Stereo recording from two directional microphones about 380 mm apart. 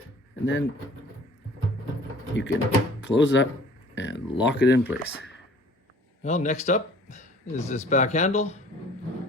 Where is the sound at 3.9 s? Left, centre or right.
Left.